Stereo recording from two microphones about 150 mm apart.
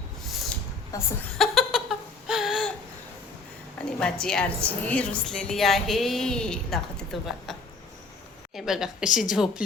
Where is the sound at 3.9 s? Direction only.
5° left (ahead or behind).